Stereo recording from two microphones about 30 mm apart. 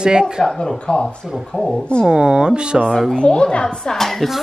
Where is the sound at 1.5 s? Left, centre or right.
Left.